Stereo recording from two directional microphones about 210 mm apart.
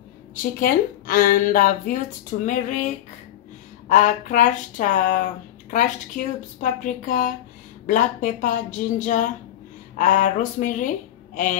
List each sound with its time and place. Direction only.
0.6 s speech: 45° left (ahead or behind)
3.9 s speech: 40° left (ahead or behind)